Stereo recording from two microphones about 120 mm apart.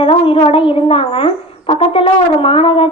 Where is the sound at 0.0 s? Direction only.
50° left (ahead or behind).